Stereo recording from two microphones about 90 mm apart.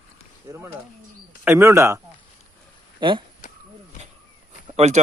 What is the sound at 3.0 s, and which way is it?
Speech, 65° right (ahead or behind).